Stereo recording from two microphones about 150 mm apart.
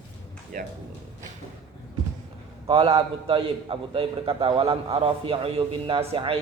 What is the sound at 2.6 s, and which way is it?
A man's voice, 40° right (ahead or behind).